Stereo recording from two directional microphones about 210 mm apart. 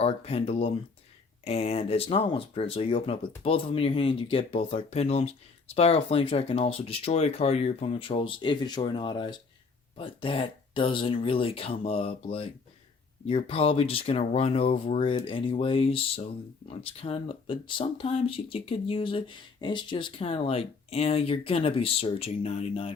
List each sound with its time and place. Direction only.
0.0 s speech: 30° left (ahead or behind)